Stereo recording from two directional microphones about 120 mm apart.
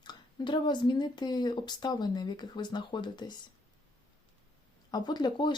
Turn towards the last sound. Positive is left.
turn(degrees=40)  # may be behind; listen again after turning